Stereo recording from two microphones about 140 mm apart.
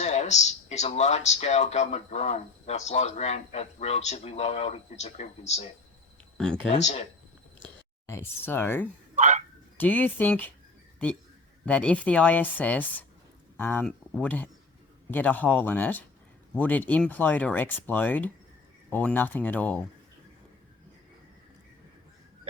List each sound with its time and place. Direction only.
0.0 s speech: 50° left (ahead or behind)
6.3 s speech: 5° left (ahead or behind)
6.7 s speech: 50° left (ahead or behind)
8.0 s speech: 20° left (ahead or behind)
9.1 s a sound: 55° right (ahead or behind)
9.7 s speech: 15° left (ahead or behind)
11.6 s speech: 10° left (ahead or behind)